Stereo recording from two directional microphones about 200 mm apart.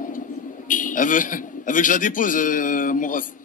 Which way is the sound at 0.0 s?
40° left (ahead or behind).